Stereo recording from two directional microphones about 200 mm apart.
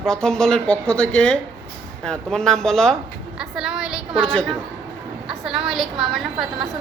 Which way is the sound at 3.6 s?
5° right (ahead or behind).